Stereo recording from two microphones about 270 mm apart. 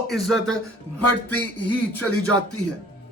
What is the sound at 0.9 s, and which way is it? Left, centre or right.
Speech, left.